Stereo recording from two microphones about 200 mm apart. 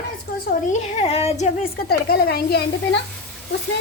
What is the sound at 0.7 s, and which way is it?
Speech, 35° left (ahead or behind).